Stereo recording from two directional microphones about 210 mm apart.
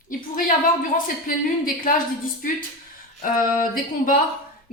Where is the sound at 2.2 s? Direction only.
40° left (ahead or behind).